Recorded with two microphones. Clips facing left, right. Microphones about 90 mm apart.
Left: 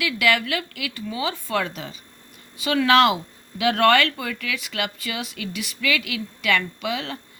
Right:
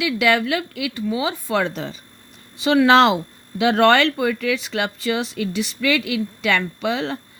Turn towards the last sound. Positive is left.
turn(degrees=-30)  # may be behind; listen again after turning